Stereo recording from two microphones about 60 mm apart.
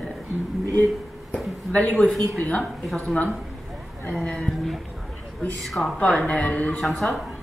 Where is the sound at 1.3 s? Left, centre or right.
Centre.